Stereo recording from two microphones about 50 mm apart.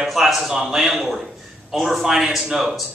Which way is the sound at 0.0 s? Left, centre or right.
Centre.